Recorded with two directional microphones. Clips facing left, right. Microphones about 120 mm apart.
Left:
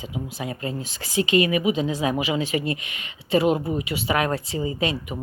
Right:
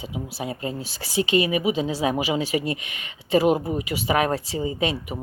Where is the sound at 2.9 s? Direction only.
35° left (ahead or behind).